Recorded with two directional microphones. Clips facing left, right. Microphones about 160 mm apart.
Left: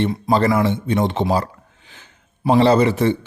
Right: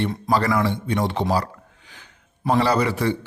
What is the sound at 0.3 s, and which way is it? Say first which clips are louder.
A man's voice: left 3 dB; 25° left (ahead or behind).